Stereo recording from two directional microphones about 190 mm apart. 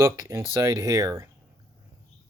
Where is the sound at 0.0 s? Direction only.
15° right (ahead or behind).